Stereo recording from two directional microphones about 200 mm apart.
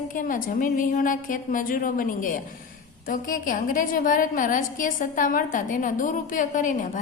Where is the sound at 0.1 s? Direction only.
40° left (ahead or behind).